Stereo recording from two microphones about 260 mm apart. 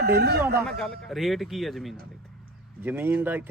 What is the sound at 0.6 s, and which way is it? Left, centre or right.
A man's voice, centre.